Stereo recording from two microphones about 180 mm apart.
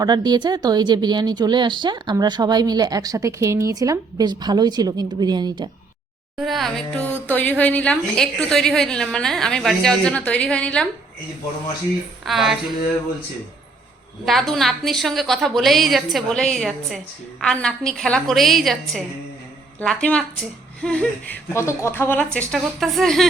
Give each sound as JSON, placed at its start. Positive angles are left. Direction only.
{"t": 0.0, "sound": "speech", "side_deg": -25}
{"t": 6.3, "sound": "speech", "side_deg": 0}
{"t": 12.2, "sound": "speech", "side_deg": 0}
{"t": 14.3, "sound": "a woman's voice", "side_deg": 0}